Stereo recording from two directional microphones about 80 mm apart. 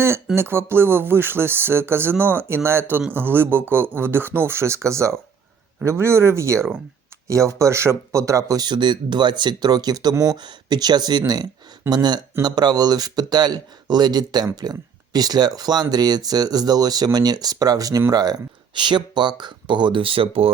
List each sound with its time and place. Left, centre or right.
0.3 s speech: right
8.6 s speech: right
18.7 s speech: right